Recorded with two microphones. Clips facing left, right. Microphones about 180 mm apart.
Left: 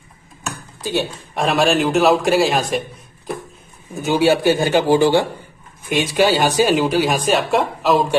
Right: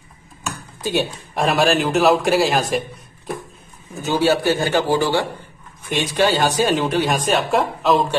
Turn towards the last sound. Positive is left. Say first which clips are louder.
# left 1 dB
turn(degrees=0)  # may be behind; listen again after turning